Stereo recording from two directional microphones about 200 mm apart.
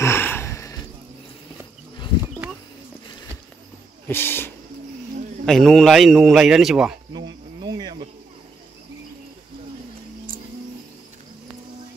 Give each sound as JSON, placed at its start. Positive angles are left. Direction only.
{"t": 0.0, "sound": "a sound", "side_deg": 10}
{"t": 4.1, "sound": "a man's voice", "side_deg": 10}
{"t": 7.1, "sound": "cricket", "side_deg": -20}